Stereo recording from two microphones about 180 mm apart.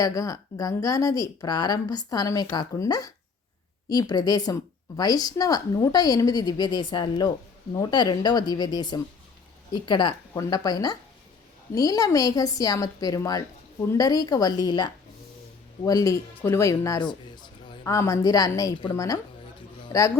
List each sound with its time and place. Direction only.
0.0 s a woman's voice: 20° left (ahead or behind)